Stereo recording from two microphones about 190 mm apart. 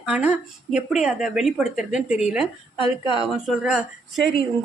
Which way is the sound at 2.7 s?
25° left (ahead or behind).